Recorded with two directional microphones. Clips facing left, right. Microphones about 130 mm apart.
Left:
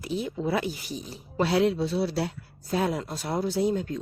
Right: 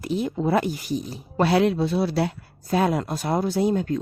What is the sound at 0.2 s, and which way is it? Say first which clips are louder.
Speech: right 6 dB; 55° right (ahead or behind).